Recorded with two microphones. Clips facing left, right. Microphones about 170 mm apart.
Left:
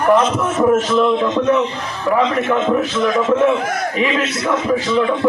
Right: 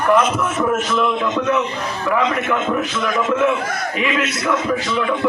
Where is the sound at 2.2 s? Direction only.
30° left (ahead or behind).